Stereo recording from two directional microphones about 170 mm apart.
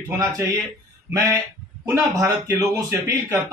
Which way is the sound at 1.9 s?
20° right (ahead or behind).